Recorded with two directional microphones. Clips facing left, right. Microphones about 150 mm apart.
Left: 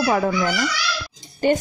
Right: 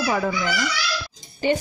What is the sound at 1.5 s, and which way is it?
Speech, 50° left (ahead or behind).